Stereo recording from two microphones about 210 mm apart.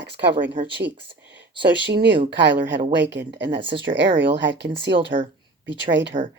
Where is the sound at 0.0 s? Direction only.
55° right (ahead or behind).